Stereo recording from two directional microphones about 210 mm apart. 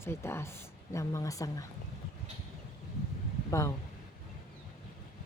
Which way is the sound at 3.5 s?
15° left (ahead or behind).